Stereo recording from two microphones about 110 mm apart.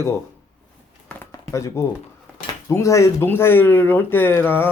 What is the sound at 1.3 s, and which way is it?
Speech, 25° left (ahead or behind).